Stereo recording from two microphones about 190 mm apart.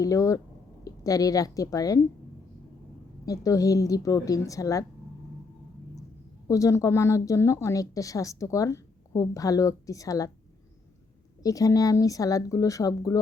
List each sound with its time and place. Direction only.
0.0 s a woman's voice: 15° left (ahead or behind)
3.2 s a woman's voice: 20° left (ahead or behind)
6.5 s a woman's voice: 15° left (ahead or behind)
11.4 s a woman's voice: 20° left (ahead or behind)